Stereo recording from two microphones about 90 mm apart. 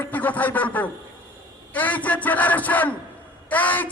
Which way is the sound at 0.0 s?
20° left (ahead or behind).